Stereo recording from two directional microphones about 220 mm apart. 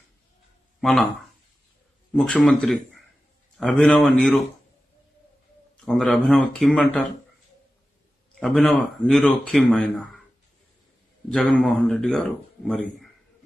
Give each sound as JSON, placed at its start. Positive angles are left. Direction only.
{"t": 0.7, "sound": "speech", "side_deg": 0}
{"t": 2.1, "sound": "speech", "side_deg": 0}
{"t": 5.9, "sound": "speech", "side_deg": 0}
{"t": 8.4, "sound": "speech", "side_deg": 0}
{"t": 11.2, "sound": "speech", "side_deg": 5}